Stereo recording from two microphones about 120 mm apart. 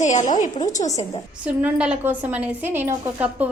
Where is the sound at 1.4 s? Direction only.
10° right (ahead or behind).